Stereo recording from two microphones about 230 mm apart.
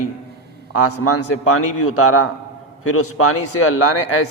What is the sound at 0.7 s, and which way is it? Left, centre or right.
A man's voice, left.